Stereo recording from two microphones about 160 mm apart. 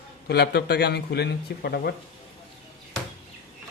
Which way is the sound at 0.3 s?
90° left.